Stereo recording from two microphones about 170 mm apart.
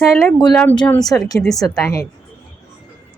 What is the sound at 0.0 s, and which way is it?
A woman's voice, centre (ahead or behind).